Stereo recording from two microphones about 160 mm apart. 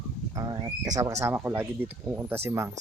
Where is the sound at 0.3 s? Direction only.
25° right (ahead or behind).